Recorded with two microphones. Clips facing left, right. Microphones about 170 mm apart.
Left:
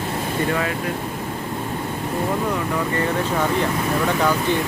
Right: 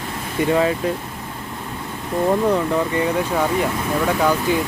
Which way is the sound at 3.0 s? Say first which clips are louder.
Right 2 dB; 10° right (ahead or behind).